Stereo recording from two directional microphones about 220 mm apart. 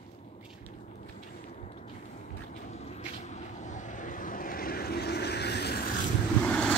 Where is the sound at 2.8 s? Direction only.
30° left (ahead or behind); by 5.9 s 45° left (ahead or behind).